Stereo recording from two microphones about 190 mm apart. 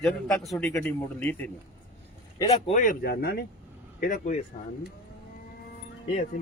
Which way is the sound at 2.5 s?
35° left (ahead or behind).